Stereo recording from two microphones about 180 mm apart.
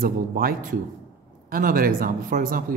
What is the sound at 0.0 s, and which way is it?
A man's voice, 55° right (ahead or behind).